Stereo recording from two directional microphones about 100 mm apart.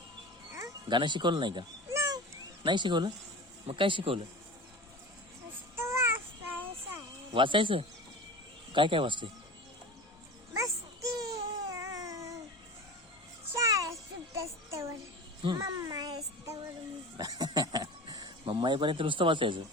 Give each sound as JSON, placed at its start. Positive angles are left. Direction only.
{"t": 0.9, "sound": "speech", "side_deg": -50}
{"t": 1.9, "sound": "a sound", "side_deg": -35}
{"t": 2.6, "sound": "speech", "side_deg": -50}
{"t": 5.7, "sound": "child singing", "side_deg": -25}
{"t": 7.3, "sound": "speech", "side_deg": -60}
{"t": 11.2, "sound": "baby cry", "side_deg": -35}
{"t": 13.5, "sound": "music", "side_deg": -30}
{"t": 14.4, "sound": "a sound", "side_deg": -30}
{"t": 15.5, "sound": "music", "side_deg": -35}
{"t": 17.2, "sound": "a sound", "side_deg": -40}
{"t": 18.4, "sound": "speech", "side_deg": -50}